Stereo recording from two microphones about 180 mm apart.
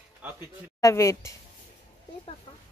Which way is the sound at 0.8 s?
15° left (ahead or behind).